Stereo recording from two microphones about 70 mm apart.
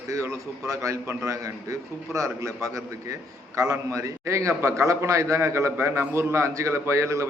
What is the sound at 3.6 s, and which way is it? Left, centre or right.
A man's voice, right.